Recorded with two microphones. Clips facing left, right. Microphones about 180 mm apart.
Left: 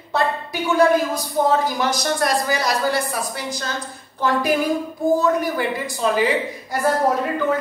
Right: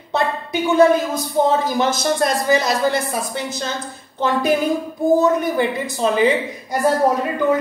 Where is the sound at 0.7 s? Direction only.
20° right (ahead or behind).